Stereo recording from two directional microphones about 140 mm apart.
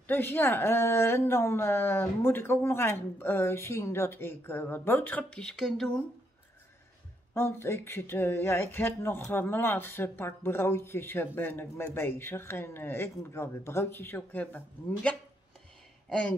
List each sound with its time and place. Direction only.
0.0 s speech: 15° left (ahead or behind)
7.3 s speech: 15° left (ahead or behind)